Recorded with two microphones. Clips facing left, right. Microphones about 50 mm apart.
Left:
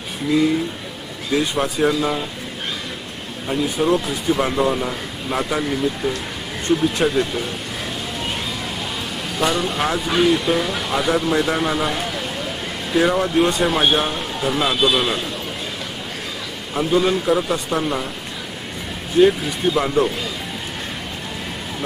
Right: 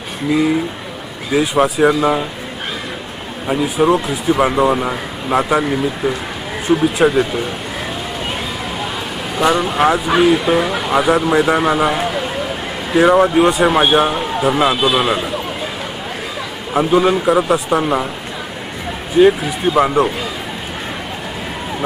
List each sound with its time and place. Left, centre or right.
0.3 s speech: centre
1.9 s speech: right
3.5 s speech: centre
4.7 s a man's voice: right
5.3 s speech: centre
7.1 s speech: centre
9.4 s speech: centre
16.7 s speech: centre
17.7 s speech: right
19.1 s speech: centre